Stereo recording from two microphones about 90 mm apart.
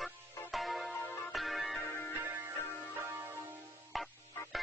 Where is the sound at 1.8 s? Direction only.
25° left (ahead or behind).